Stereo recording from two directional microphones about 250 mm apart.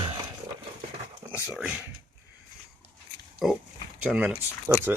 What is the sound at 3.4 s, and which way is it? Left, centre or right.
Speech, centre.